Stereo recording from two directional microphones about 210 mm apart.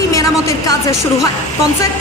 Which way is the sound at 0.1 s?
15° left (ahead or behind).